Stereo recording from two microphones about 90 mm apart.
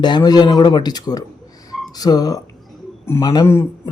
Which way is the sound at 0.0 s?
55° left (ahead or behind).